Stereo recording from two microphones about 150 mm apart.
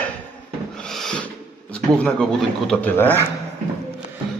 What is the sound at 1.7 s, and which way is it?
A man's voice, 5° left (ahead or behind).